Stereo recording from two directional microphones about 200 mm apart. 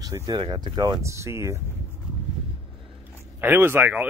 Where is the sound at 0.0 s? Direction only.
20° right (ahead or behind).